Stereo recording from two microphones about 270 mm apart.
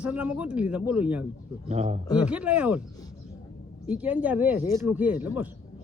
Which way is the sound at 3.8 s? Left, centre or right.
Centre.